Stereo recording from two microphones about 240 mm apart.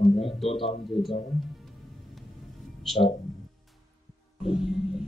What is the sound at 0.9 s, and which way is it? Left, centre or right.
Speech, centre.